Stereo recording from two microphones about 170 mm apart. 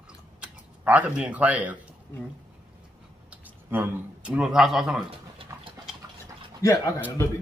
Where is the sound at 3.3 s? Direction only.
10° right (ahead or behind).